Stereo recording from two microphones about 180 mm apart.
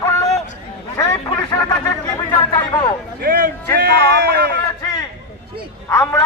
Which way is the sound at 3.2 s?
55° right (ahead or behind).